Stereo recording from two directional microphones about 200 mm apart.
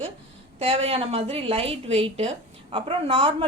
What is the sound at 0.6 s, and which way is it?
A woman's voice, 30° right (ahead or behind).